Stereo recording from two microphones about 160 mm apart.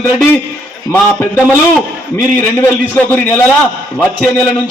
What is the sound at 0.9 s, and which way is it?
A man's voice, 10° left (ahead or behind).